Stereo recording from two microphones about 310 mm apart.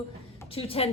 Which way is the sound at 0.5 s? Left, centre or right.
Centre.